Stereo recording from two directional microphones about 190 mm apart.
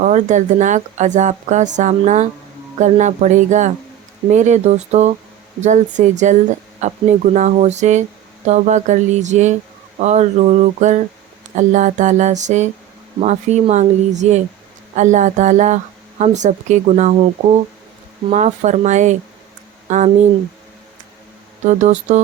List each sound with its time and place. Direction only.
0.0 s speech: 40° right (ahead or behind)
21.7 s speech: 40° right (ahead or behind)